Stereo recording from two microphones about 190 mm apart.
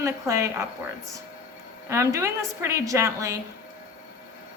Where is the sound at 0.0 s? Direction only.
15° right (ahead or behind).